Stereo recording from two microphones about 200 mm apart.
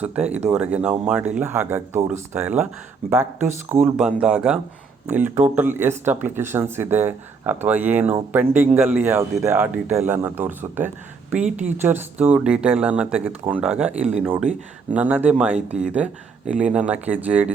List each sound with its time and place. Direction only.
0.0 s speech: 5° right (ahead or behind)
3.7 s speech: 10° right (ahead or behind)